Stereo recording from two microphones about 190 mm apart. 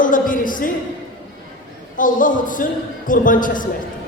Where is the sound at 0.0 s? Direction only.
45° left (ahead or behind).